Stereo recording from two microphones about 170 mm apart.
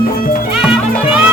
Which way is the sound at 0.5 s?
5° right (ahead or behind).